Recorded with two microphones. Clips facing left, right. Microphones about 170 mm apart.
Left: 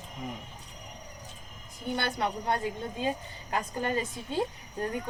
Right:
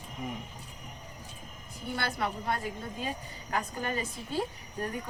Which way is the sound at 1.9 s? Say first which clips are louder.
Left 2 dB; 25° left (ahead or behind).